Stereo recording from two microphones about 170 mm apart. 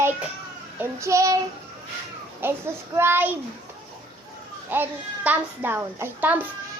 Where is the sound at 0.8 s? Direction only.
15° right (ahead or behind).